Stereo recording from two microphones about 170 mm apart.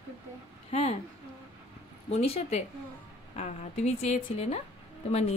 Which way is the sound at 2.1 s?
40° left (ahead or behind).